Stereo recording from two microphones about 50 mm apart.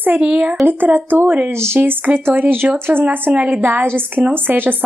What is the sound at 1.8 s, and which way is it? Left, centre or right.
Speech, right.